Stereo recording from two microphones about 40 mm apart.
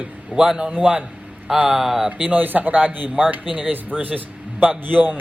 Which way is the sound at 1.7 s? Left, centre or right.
Centre.